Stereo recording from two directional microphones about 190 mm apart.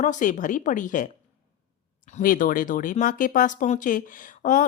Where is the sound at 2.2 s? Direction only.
45° left (ahead or behind).